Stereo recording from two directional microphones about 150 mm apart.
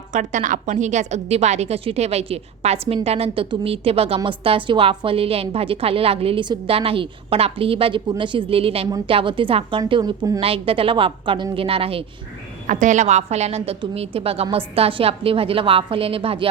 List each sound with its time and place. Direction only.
0.1 s a woman's voice: 55° right (ahead or behind); by 10.4 s 25° right (ahead or behind)
10.4 s a woman's voice: 40° right (ahead or behind)
12.6 s a woman's voice: 55° right (ahead or behind); by 16.5 s 35° right (ahead or behind)